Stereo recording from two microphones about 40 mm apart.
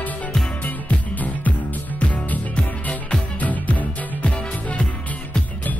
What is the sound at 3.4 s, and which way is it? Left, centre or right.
Music, left.